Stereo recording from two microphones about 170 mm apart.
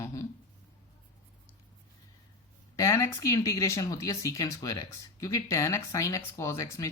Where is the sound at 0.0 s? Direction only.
15° left (ahead or behind).